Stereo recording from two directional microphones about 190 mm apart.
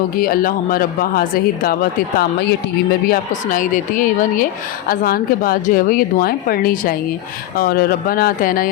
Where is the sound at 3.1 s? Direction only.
45° left (ahead or behind).